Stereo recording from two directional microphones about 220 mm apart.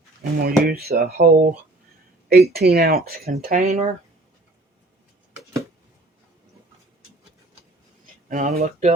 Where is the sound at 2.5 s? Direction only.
45° right (ahead or behind).